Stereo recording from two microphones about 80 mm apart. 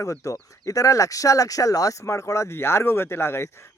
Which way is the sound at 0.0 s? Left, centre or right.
Left.